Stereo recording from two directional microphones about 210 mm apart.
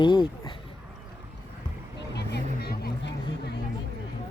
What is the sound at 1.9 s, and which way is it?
Vehicle, 55° left (ahead or behind).